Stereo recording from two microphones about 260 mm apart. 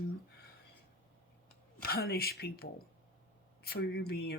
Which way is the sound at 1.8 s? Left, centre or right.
Left.